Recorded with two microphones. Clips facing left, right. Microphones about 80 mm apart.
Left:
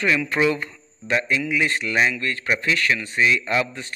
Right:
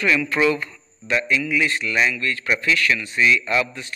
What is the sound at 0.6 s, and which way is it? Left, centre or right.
A man's voice, left.